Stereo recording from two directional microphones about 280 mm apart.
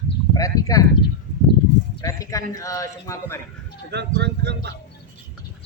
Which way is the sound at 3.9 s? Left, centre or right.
Right.